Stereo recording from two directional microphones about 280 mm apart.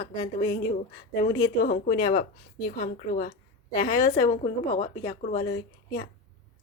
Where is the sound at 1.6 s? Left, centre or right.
Left.